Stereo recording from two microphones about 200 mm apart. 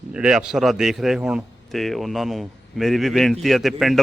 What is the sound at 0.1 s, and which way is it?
A man's voice, 5° right (ahead or behind).